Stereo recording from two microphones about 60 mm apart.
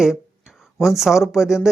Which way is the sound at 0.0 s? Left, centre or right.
Centre.